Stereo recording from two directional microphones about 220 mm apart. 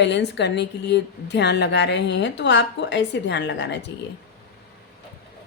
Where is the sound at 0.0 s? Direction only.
50° left (ahead or behind).